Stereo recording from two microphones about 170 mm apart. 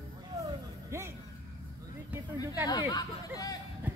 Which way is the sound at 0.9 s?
15° right (ahead or behind).